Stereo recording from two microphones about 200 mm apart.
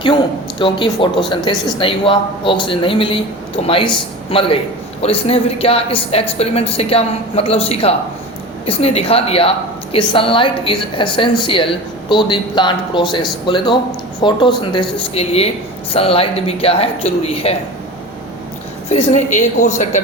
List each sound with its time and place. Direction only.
0.6 s a woman's voice: 25° left (ahead or behind)
18.9 s a woman's voice: 35° left (ahead or behind)